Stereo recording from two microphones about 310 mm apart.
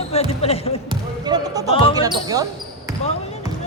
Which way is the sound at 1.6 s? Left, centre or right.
Centre.